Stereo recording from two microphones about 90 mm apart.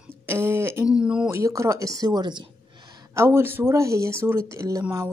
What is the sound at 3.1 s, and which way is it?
Speech, 30° right (ahead or behind).